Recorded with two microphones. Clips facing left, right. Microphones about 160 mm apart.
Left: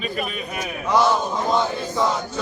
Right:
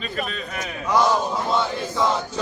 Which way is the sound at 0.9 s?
10° right (ahead or behind).